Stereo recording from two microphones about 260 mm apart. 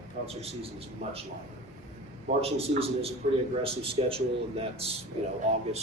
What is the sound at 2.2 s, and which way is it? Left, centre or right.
A man's voice, right.